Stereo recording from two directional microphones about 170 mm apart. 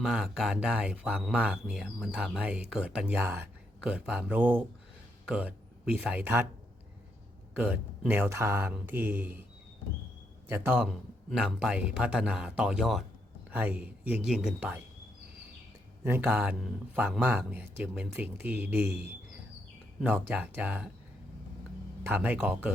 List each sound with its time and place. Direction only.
0.0 s speech: 5° right (ahead or behind)
7.6 s speech: 10° right (ahead or behind)
10.5 s speech: 10° right (ahead or behind)
10.8 s speech: centre (ahead or behind)
16.0 s speech: 10° right (ahead or behind)
18.9 s speech: 75° right (ahead or behind)
20.0 s speech: 10° right (ahead or behind)
22.0 s speech: 10° right (ahead or behind)